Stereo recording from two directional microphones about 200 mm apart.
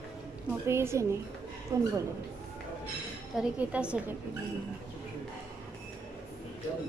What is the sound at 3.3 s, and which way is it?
Speech, 5° right (ahead or behind).